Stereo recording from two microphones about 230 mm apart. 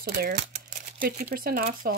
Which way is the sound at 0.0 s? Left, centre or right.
Right.